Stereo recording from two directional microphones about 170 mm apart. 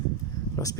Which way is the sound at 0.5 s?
20° left (ahead or behind).